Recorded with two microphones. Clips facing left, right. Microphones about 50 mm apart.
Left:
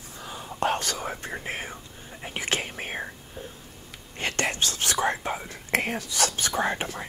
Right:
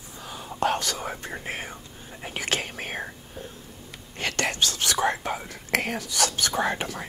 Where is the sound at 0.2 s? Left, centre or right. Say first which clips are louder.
Right 1 dB; left.